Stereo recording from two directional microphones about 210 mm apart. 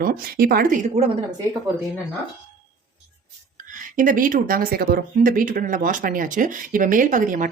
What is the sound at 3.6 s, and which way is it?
Speech, 40° right (ahead or behind).